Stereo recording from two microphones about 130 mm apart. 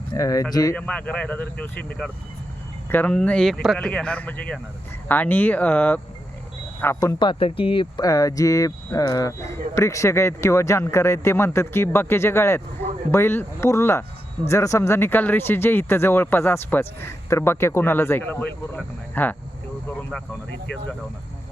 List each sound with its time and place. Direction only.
0.1 s speech: 25° left (ahead or behind)
0.8 s speech: 10° left (ahead or behind)
7.2 s speech: 40° left (ahead or behind); by 19.4 s 15° left (ahead or behind)